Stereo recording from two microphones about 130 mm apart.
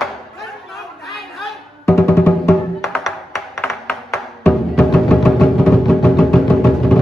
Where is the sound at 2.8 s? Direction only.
Centre (ahead or behind).